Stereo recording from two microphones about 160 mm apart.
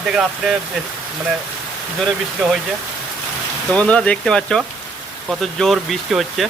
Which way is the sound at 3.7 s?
5° left (ahead or behind).